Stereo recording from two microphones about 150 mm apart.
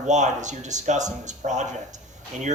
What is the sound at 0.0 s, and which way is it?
Speech, 55° right (ahead or behind).